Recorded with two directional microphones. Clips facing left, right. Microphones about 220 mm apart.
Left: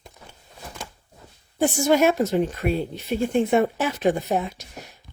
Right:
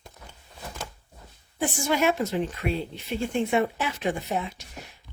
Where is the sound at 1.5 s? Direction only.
45° left (ahead or behind).